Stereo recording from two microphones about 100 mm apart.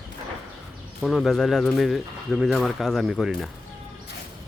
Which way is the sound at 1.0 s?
Centre (ahead or behind).